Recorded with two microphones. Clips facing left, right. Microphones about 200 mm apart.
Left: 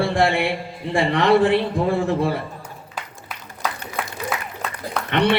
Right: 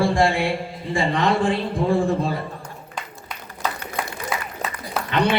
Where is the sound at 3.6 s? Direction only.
Centre (ahead or behind).